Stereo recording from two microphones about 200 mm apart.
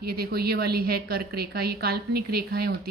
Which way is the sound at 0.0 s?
50° right (ahead or behind).